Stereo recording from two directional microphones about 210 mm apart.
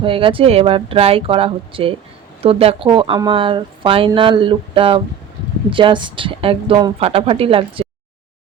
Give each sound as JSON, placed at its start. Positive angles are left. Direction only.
{"t": 0.0, "sound": "speech", "side_deg": -25}